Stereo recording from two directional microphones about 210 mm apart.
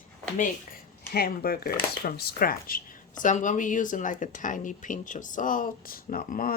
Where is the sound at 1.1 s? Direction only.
45° left (ahead or behind).